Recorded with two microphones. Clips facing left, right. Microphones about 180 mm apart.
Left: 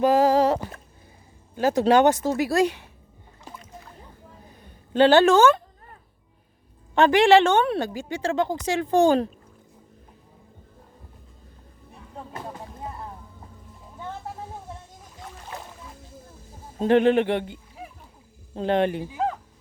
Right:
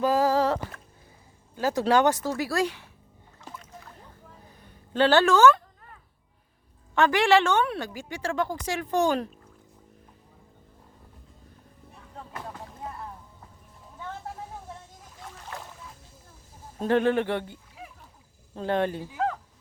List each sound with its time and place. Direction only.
0.0 s a sound: 20° left (ahead or behind)
1.5 s a woman's voice: 20° left (ahead or behind)
3.4 s music: 15° left (ahead or behind)
4.9 s speech: 20° left (ahead or behind)
6.9 s a woman's voice: 25° left (ahead or behind)
12.3 s music: 20° left (ahead or behind)
15.5 s music: 20° left (ahead or behind)
16.7 s a woman's voice: 20° left (ahead or behind)